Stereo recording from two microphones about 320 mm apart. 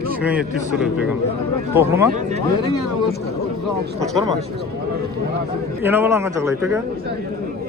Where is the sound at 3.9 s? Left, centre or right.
Centre.